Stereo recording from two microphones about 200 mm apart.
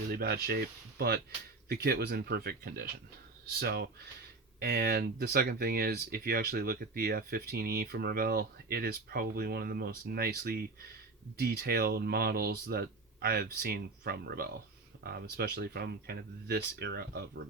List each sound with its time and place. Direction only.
0.1 s speech: 50° right (ahead or behind)